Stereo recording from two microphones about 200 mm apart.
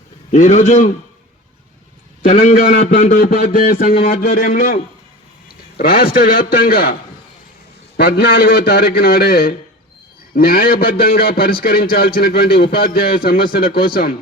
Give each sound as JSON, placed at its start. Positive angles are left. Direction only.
{"t": 0.3, "sound": "a man's voice", "side_deg": 35}
{"t": 2.2, "sound": "a man's voice", "side_deg": 35}
{"t": 7.9, "sound": "a man's voice", "side_deg": 50}